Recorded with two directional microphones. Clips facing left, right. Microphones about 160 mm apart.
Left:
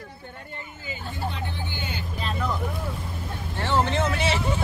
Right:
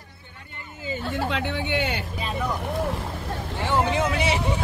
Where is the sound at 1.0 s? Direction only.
90° right; by 2.0 s 75° right (ahead or behind).